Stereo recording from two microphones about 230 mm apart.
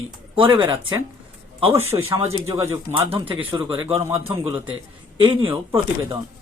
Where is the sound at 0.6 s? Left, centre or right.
Centre.